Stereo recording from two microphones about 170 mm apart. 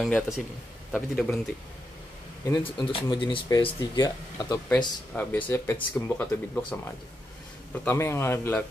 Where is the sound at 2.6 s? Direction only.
30° left (ahead or behind).